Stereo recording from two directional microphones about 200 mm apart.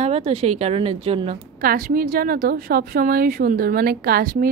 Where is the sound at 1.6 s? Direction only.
45° right (ahead or behind).